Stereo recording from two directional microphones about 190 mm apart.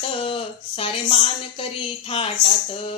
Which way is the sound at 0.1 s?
30° left (ahead or behind).